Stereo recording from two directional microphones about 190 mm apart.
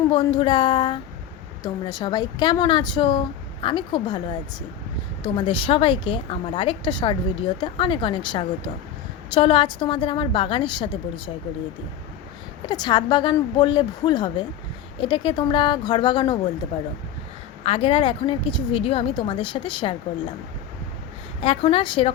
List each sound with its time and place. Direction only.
0.1 s a woman's voice: 25° left (ahead or behind)
12.6 s a woman's voice: 25° left (ahead or behind)
17.7 s a woman's voice: 25° left (ahead or behind)
21.4 s a woman's voice: 30° left (ahead or behind)